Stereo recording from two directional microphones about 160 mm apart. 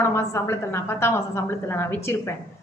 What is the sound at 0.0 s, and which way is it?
A woman's voice, 15° left (ahead or behind).